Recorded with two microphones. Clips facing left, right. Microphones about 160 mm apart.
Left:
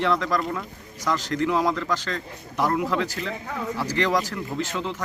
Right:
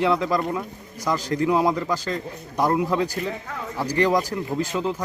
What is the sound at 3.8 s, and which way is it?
Speech, 10° right (ahead or behind).